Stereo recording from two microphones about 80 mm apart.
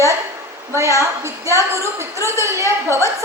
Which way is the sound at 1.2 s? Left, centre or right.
Right.